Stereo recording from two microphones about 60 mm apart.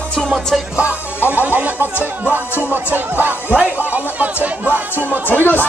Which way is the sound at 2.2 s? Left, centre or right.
Right.